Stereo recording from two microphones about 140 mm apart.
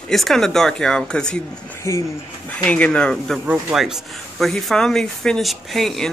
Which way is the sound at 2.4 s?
10° left (ahead or behind).